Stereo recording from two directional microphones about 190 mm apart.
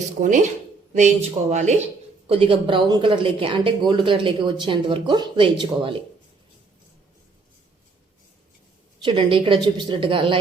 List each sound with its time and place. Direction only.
0.2 s speech: 40° right (ahead or behind)
9.0 s speech: 25° right (ahead or behind)